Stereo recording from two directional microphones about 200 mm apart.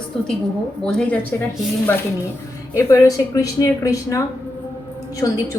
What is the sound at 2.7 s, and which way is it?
Speech, 15° left (ahead or behind).